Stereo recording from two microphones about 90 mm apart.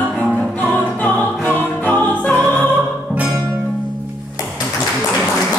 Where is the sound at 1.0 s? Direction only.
20° left (ahead or behind).